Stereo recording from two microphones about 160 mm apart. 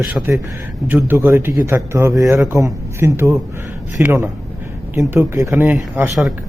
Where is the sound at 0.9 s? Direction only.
15° right (ahead or behind).